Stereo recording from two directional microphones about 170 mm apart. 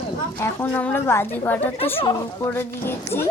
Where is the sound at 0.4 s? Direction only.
15° left (ahead or behind).